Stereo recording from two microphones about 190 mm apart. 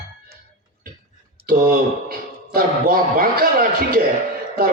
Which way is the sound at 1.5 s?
50° right (ahead or behind).